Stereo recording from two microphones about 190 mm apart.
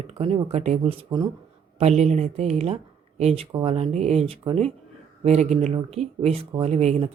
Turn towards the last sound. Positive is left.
turn(degrees=-35)  # may be behind; listen again after turning